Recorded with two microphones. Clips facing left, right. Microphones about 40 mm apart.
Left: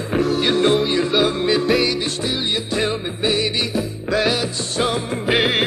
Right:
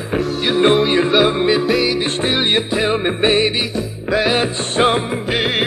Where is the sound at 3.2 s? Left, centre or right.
Right.